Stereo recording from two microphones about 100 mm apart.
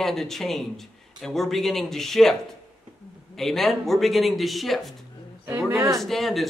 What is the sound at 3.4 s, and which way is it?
Speech, centre (ahead or behind).